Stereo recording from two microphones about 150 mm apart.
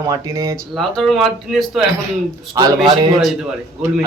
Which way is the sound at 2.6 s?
30° right (ahead or behind).